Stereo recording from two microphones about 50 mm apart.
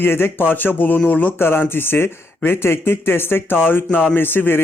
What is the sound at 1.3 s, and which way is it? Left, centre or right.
Speech, left.